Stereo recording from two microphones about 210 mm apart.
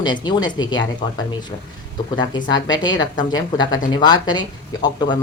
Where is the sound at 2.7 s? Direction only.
20° left (ahead or behind).